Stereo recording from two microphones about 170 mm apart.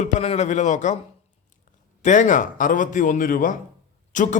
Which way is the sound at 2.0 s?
45° left (ahead or behind).